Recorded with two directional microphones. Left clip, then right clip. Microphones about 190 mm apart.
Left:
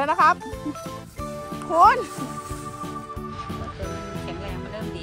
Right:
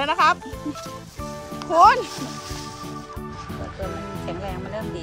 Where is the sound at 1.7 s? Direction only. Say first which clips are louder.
Right 2 dB; 5° right (ahead or behind).